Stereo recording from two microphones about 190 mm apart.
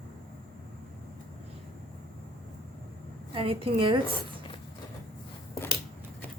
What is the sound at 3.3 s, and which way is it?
Speech, 30° right (ahead or behind).